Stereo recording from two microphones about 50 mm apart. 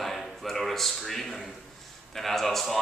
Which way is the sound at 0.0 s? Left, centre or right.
Centre.